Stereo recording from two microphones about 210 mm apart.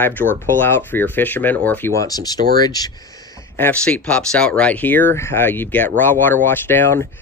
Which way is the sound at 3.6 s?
5° left (ahead or behind).